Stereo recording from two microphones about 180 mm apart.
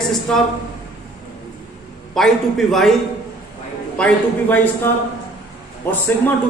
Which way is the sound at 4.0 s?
10° left (ahead or behind).